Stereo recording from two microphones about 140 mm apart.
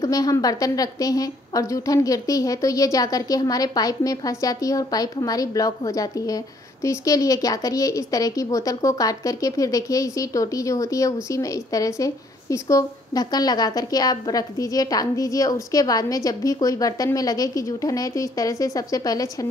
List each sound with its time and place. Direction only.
0.0 s a woman's voice: 25° left (ahead or behind)